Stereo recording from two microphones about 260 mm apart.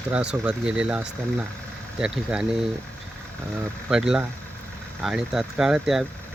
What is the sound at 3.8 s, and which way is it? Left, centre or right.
Speech, centre.